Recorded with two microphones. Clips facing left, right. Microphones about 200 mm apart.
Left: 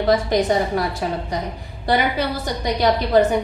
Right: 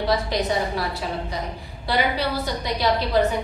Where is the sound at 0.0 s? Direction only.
50° left (ahead or behind).